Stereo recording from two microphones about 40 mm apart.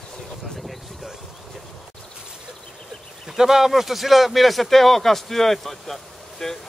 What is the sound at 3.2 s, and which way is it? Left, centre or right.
Speech, centre.